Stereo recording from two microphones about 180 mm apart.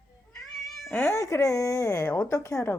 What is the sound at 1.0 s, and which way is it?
Speech, 15° left (ahead or behind).